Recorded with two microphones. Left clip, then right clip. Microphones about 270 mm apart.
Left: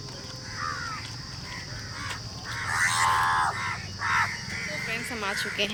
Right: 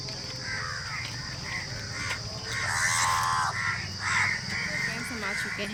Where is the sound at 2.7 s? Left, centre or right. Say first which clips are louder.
Left 3 dB; right.